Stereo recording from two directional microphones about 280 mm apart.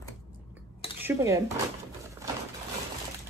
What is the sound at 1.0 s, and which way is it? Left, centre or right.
Dishes, centre.